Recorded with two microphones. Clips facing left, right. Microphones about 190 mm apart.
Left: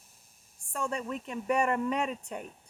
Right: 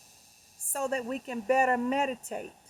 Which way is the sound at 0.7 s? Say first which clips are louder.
Right 3 dB; 40° right (ahead or behind).